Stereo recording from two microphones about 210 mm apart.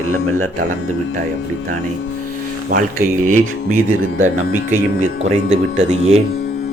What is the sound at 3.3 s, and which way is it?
Speech, 75° right (ahead or behind).